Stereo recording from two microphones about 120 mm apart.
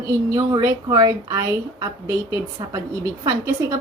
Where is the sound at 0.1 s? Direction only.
30° right (ahead or behind).